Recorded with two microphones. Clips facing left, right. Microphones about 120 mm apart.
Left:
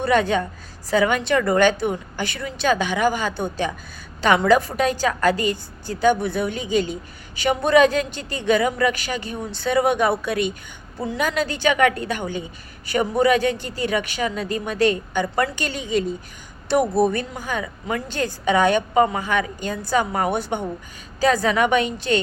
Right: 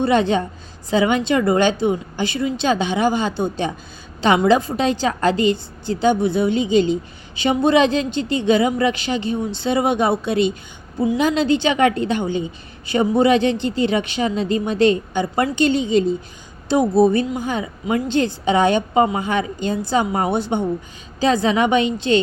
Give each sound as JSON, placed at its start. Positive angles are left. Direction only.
{"t": 0.0, "sound": "a woman's voice", "side_deg": -25}